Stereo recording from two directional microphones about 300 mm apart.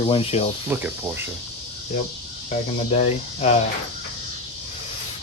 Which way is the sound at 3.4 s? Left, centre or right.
Left.